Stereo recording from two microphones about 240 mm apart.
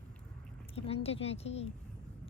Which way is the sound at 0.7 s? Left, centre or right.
Left.